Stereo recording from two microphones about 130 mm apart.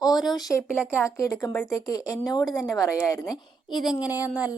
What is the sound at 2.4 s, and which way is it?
Speech, centre (ahead or behind).